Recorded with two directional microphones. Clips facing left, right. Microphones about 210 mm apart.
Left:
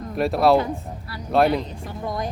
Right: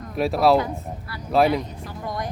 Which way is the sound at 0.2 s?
Centre (ahead or behind).